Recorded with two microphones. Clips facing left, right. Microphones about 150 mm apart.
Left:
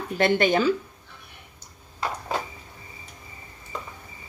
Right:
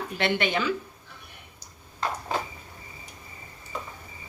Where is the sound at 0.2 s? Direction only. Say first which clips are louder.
Left 6 dB; 40° left (ahead or behind).